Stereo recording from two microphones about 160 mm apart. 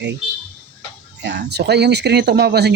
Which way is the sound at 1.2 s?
90° right.